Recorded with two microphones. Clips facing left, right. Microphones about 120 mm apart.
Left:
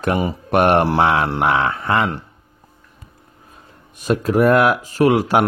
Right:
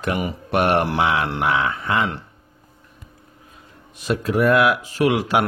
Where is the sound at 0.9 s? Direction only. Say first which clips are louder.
Left 4 dB; 60° left (ahead or behind).